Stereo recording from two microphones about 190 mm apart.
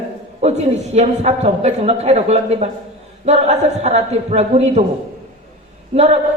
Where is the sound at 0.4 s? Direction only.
35° right (ahead or behind).